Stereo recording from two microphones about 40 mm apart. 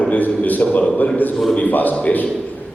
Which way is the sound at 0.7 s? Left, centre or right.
Left.